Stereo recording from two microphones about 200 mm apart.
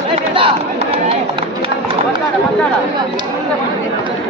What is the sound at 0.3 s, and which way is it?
Chatter, 25° right (ahead or behind).